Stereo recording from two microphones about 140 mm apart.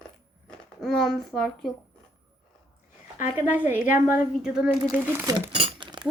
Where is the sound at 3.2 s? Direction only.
10° right (ahead or behind).